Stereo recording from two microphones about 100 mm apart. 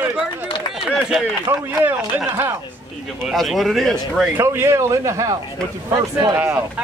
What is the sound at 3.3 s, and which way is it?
Speech, centre (ahead or behind).